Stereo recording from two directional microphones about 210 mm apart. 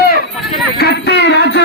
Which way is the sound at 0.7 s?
55° left (ahead or behind).